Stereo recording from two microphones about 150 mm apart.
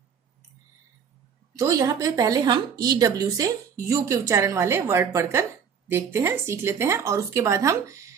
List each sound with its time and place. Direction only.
1.5 s a woman's voice: 25° right (ahead or behind)